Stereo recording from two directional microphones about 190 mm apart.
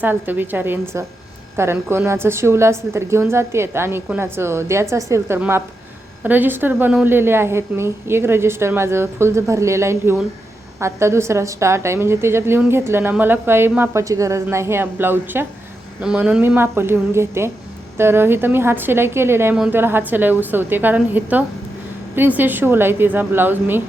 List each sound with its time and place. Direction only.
0.0 s a woman's voice: 10° right (ahead or behind)